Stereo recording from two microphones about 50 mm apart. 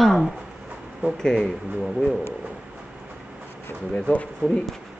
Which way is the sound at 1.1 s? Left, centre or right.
Centre.